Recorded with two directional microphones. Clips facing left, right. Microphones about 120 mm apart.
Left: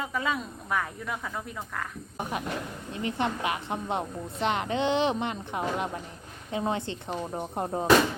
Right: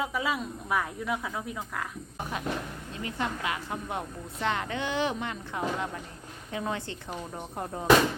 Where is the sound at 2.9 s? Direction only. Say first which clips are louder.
Left 4 dB; 25° left (ahead or behind).